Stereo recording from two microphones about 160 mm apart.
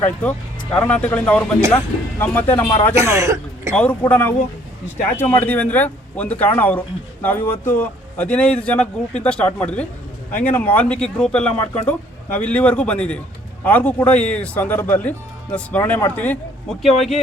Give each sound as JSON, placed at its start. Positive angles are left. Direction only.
{"t": 0.0, "sound": "speech", "side_deg": 10}
{"t": 2.9, "sound": "speech", "side_deg": -20}
{"t": 4.1, "sound": "speech", "side_deg": 10}